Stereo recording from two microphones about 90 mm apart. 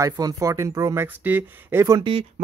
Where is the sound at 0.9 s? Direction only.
20° right (ahead or behind).